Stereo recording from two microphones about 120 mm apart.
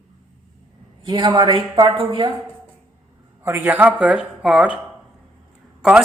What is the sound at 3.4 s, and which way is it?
Speech, 15° right (ahead or behind).